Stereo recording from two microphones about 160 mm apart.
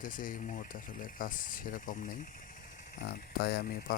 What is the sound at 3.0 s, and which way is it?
Speech, 75° left (ahead or behind).